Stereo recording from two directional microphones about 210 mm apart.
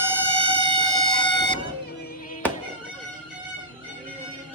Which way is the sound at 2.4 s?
5° left (ahead or behind).